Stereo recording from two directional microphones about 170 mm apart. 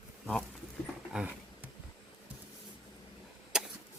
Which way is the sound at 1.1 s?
10° right (ahead or behind).